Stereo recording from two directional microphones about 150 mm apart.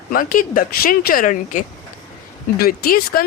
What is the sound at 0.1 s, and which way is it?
Speech, 65° left (ahead or behind).